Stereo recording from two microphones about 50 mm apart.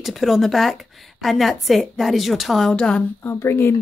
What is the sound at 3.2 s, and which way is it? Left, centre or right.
Speech, left.